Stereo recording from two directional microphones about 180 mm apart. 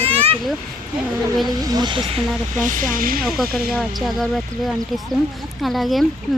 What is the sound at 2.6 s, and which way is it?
Speech, 45° right (ahead or behind).